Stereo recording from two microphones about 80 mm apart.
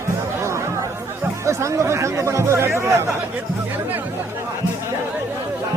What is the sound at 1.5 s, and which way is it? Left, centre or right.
Speech, right.